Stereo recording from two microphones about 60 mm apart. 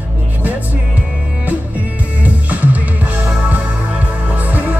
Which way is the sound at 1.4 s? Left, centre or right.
Right.